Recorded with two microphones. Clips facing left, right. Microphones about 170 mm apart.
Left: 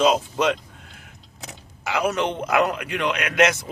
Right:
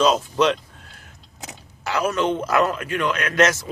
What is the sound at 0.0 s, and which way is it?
Speech, 15° left (ahead or behind).